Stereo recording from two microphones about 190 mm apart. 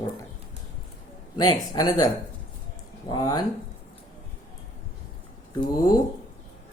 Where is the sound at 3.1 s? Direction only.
20° left (ahead or behind).